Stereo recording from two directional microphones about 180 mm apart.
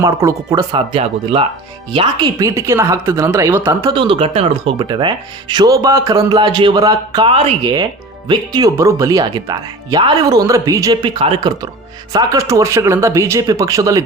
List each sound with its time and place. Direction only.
0.0 s speech: 15° right (ahead or behind)
0.7 s speech: 30° right (ahead or behind); by 3.9 s 15° right (ahead or behind)
3.9 s speech: 30° right (ahead or behind)
12.1 s speech: 20° right (ahead or behind)